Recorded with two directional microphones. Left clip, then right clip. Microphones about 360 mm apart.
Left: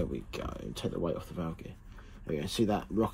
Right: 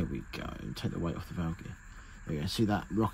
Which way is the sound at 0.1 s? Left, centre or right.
Right.